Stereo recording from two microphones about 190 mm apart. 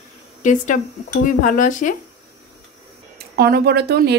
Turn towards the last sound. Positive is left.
turn(degrees=-55)  # may be behind; listen again after turning